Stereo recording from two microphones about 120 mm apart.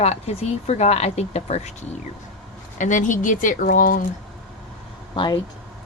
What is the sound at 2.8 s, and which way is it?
Speech, 90° left.